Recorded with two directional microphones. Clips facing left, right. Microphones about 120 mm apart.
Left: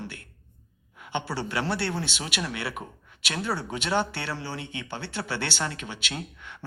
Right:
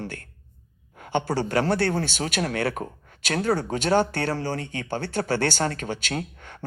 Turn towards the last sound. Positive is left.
turn(degrees=-45)  # may be behind; listen again after turning